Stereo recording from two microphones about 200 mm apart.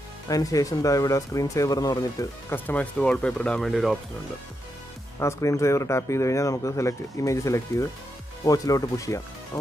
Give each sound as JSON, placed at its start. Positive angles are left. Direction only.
{"t": 0.3, "sound": "speech", "side_deg": 15}
{"t": 5.2, "sound": "speech", "side_deg": 15}